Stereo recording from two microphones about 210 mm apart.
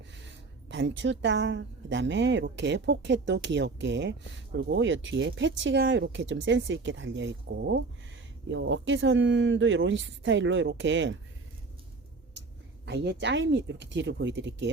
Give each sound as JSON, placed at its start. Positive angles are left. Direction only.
{"t": 0.2, "sound": "speech", "side_deg": -60}
{"t": 12.8, "sound": "speech", "side_deg": -55}